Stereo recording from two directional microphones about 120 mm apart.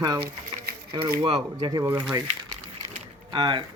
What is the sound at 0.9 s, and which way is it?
Speech, 45° right (ahead or behind).